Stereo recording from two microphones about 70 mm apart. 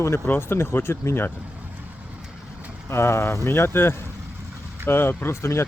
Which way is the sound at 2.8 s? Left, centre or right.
Left.